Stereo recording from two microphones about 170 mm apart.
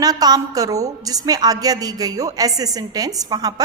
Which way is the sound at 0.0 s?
20° right (ahead or behind).